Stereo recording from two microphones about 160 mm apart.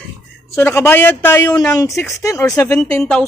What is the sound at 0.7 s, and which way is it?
Speech, 15° left (ahead or behind).